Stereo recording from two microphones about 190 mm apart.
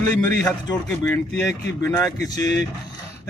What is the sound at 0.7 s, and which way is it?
Speech, 10° left (ahead or behind).